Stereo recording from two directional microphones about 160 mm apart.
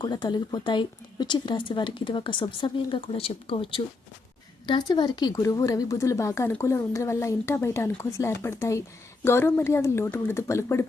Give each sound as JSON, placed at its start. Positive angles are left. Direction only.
{"t": 0.0, "sound": "a woman's voice", "side_deg": 25}